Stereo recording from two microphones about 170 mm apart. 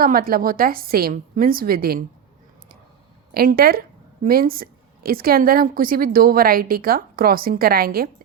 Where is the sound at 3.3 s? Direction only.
60° right (ahead or behind).